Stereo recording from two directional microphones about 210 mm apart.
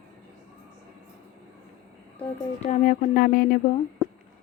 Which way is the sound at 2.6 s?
40° left (ahead or behind).